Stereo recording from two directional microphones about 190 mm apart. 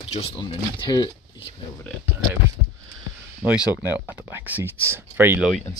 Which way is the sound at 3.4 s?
5° right (ahead or behind).